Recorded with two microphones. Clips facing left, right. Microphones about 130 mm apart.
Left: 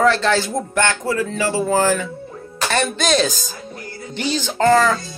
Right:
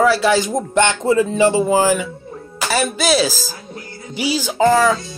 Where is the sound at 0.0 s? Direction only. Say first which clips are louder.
Right 2 dB; 10° right (ahead or behind).